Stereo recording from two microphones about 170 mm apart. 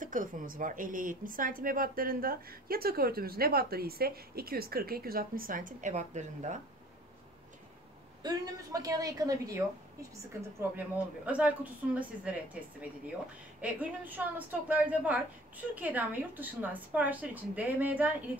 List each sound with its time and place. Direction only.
0.0 s speech: 50° right (ahead or behind)
8.2 s a woman's voice: 20° right (ahead or behind)
10.8 s a woman's voice: 10° right (ahead or behind)
13.6 s a woman's voice: 10° right (ahead or behind)